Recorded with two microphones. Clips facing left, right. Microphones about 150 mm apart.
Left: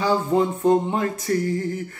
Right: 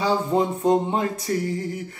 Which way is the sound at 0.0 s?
20° right (ahead or behind).